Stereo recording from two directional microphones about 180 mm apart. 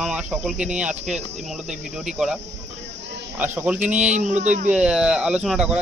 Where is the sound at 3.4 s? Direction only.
10° right (ahead or behind).